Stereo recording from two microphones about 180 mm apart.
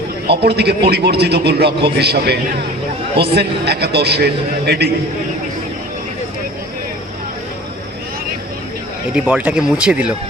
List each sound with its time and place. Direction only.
0.3 s a man's voice: 65° right (ahead or behind)
9.1 s speech: 5° right (ahead or behind)